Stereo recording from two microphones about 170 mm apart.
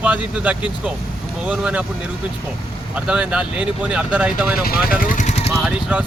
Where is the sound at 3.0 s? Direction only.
5° right (ahead or behind).